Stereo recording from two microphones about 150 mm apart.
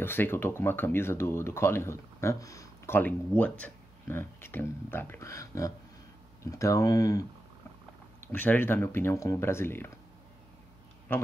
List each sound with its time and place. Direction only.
0.0 s speech: 15° left (ahead or behind)
3.0 s speech: 10° left (ahead or behind)
8.3 s speech: 10° left (ahead or behind)